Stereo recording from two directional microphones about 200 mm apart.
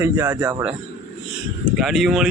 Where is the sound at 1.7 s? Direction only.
Centre (ahead or behind).